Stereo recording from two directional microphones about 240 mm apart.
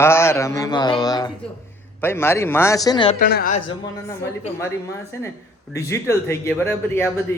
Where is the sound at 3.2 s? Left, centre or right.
Left.